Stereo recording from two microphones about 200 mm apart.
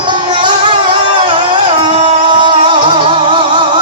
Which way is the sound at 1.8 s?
25° right (ahead or behind).